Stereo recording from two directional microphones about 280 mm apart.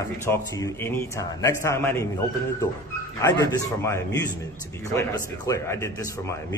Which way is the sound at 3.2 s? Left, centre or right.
Centre.